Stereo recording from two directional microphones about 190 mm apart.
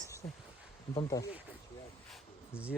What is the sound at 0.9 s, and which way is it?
Speech, 20° left (ahead or behind).